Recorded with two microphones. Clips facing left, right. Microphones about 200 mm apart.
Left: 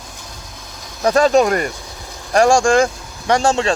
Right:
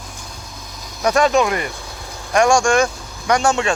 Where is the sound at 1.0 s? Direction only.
35° left (ahead or behind).